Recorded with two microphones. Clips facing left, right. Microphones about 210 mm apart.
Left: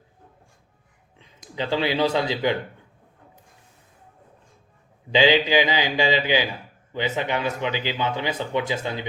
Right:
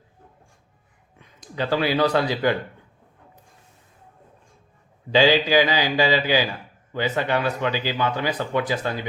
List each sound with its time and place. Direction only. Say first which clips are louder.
1.2 s speech: right 2 dB; 20° left (ahead or behind)
5.1 s speech: right 1 dB; 20° left (ahead or behind)